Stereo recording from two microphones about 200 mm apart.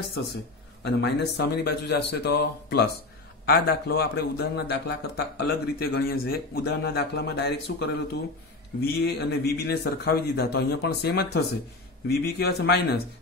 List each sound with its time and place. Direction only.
0.8 s a man's voice: 55° left (ahead or behind)